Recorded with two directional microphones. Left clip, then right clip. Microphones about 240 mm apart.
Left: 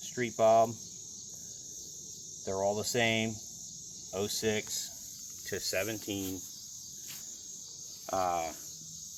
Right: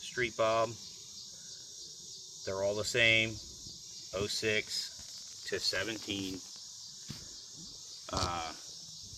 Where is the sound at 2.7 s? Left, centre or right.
Right.